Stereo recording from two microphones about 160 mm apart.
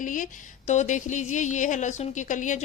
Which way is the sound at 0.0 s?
55° left (ahead or behind).